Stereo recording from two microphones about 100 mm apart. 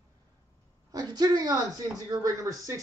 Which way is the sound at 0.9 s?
40° right (ahead or behind).